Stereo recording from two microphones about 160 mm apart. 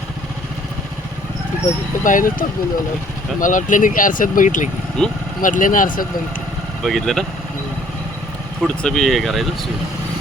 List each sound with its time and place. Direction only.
2.0 s speech: 55° left (ahead or behind)
3.4 s speech: 55° left (ahead or behind)
5.0 s speech: 5° left (ahead or behind)
5.4 s speech: 55° left (ahead or behind)
6.8 s speech: centre (ahead or behind)
8.6 s speech: centre (ahead or behind)